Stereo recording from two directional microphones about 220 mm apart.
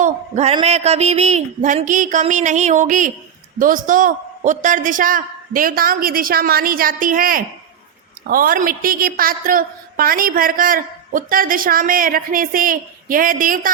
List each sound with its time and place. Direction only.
0.0 s a woman's voice: 30° right (ahead or behind)